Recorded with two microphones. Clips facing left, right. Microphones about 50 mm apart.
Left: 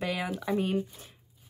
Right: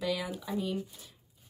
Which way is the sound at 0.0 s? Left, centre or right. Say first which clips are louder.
Left 1 dB; left.